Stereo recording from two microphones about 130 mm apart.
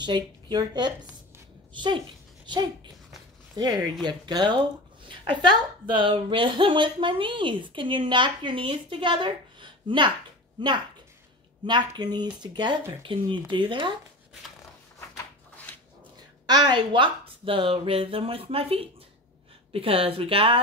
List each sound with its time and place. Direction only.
0.0 s speech: 35° right (ahead or behind)
4.0 s a woman's voice: 35° right (ahead or behind)
11.6 s a woman's voice: 35° right (ahead or behind)
16.4 s speech: 35° right (ahead or behind)